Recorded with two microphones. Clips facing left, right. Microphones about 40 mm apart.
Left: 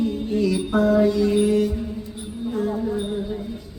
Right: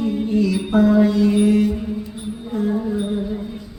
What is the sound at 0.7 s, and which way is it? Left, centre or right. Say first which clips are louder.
Mantra: right 5 dB; right.